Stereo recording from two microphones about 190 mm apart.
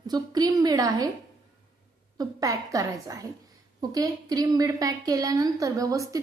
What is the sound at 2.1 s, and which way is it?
A woman's voice, 20° right (ahead or behind).